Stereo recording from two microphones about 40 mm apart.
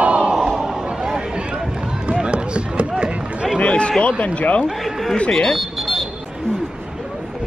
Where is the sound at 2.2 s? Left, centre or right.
Right.